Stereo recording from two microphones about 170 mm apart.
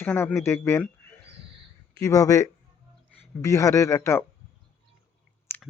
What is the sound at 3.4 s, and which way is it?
Speech, 20° left (ahead or behind).